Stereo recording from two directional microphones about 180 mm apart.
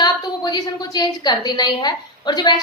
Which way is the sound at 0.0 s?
25° left (ahead or behind).